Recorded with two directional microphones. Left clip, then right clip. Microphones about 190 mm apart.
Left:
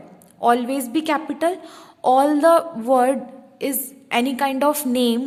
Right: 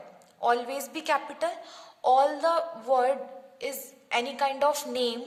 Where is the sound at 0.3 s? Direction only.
40° left (ahead or behind).